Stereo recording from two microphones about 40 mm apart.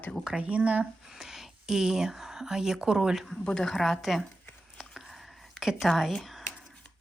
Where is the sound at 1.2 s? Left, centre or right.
Centre.